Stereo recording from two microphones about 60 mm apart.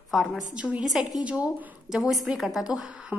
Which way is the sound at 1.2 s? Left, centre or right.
Centre.